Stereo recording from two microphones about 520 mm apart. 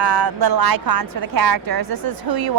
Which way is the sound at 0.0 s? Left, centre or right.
Right.